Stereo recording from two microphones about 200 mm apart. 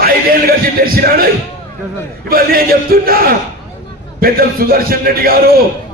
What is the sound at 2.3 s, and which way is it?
A man's voice, 50° right (ahead or behind).